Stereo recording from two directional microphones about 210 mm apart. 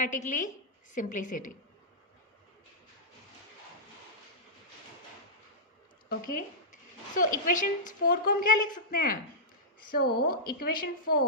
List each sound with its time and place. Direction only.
0.0 s a woman's voice: 35° left (ahead or behind)
6.1 s a woman's voice: 40° left (ahead or behind)